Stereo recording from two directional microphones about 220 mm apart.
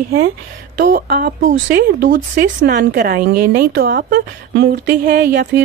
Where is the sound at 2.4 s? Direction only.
45° right (ahead or behind).